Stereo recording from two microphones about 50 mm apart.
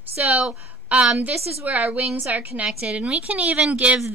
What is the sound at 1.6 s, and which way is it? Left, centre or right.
A woman's voice, right.